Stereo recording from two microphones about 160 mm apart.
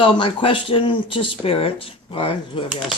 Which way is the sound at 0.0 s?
30° left (ahead or behind).